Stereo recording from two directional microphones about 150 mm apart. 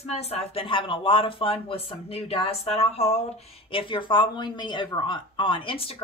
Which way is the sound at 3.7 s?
35° left (ahead or behind).